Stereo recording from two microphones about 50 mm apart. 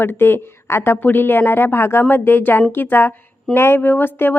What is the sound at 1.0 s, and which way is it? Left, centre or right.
A woman's voice, left.